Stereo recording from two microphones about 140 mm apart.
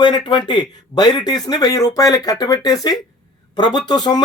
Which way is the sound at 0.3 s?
35° left (ahead or behind).